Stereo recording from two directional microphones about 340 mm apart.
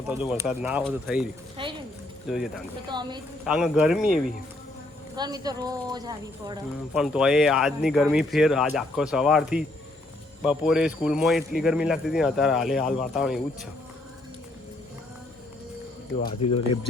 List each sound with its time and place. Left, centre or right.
0.1 s speech: centre
1.6 s speech: centre
2.2 s speech: centre
2.8 s speech: centre
3.4 s speech: centre
16.4 s speech: centre